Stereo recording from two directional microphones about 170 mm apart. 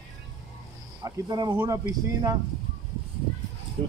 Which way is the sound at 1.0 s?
25° right (ahead or behind).